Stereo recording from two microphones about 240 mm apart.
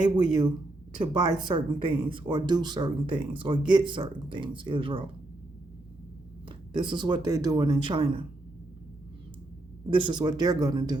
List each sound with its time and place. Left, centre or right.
0.0 s speech: centre
6.7 s speech: centre
9.9 s speech: centre